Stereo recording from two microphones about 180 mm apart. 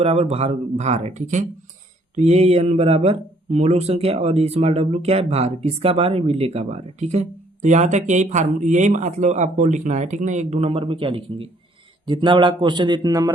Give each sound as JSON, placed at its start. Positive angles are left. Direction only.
{"t": 0.0, "sound": "a man's voice", "side_deg": -35}